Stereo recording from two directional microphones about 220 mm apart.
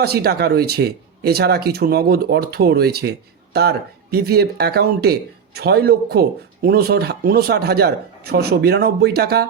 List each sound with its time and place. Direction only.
0.0 s speech: 45° right (ahead or behind)